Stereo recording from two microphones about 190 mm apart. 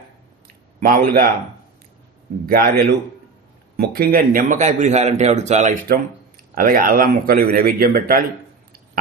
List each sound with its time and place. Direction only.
0.4 s a sound: 50° right (ahead or behind)
2.5 s a man's voice: 50° right (ahead or behind)
6.5 s a man's voice: 50° right (ahead or behind)